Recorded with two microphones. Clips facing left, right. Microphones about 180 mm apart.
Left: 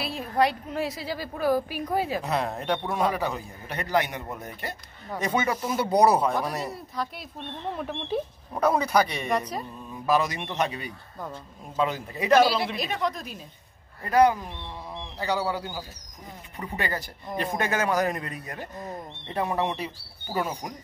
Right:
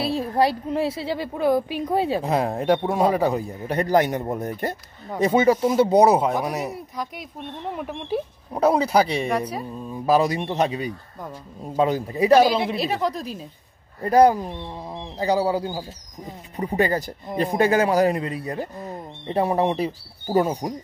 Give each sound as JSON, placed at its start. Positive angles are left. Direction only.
{"t": 0.0, "sound": "a woman's voice", "side_deg": -30}
{"t": 5.2, "sound": "speech", "side_deg": -30}
{"t": 8.5, "sound": "speech", "side_deg": -25}
{"t": 9.3, "sound": "speech", "side_deg": -10}
{"t": 9.8, "sound": "a woman's voice", "side_deg": -30}
{"t": 11.7, "sound": "a woman's voice", "side_deg": -40}
{"t": 12.4, "sound": "speech", "side_deg": -15}
{"t": 12.7, "sound": "a woman's voice", "side_deg": -30}